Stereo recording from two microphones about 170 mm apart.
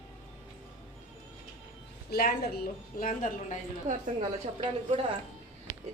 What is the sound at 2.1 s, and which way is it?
A woman's voice, 65° left (ahead or behind).